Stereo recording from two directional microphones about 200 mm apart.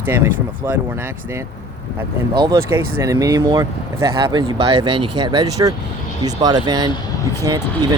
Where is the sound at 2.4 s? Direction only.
15° right (ahead or behind).